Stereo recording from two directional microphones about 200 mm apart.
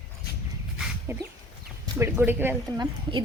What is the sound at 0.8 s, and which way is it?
Dog, 10° right (ahead or behind).